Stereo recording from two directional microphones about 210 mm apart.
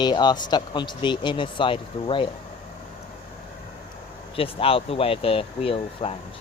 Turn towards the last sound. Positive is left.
turn(degrees=25)  # may be behind; listen again after turning